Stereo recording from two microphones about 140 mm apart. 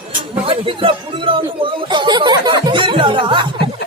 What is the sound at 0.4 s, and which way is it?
Speech, 40° right (ahead or behind).